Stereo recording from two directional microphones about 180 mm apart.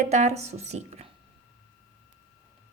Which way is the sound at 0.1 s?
40° right (ahead or behind).